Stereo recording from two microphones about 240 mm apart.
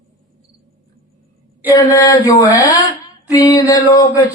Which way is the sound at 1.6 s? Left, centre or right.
Centre.